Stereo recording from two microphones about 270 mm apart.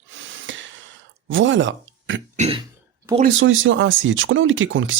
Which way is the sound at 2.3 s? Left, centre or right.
Right.